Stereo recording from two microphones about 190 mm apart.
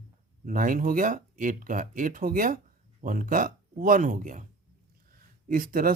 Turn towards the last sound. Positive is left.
turn(degrees=-50)  # may be behind; listen again after turning